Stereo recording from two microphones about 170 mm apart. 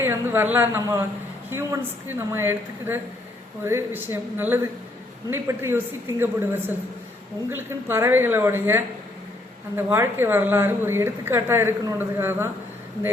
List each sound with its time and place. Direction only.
0.0 s a woman's voice: 15° right (ahead or behind)